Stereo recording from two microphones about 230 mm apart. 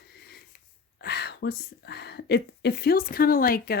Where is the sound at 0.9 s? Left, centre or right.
Left.